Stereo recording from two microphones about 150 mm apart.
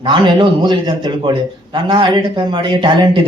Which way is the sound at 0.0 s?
30° right (ahead or behind).